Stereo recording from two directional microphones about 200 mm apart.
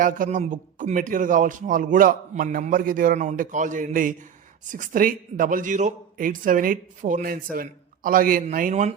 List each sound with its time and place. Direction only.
0.0 s a man's voice: 40° right (ahead or behind)